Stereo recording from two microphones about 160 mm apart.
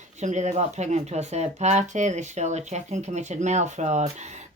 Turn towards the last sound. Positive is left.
turn(degrees=-45)  # may be behind; listen again after turning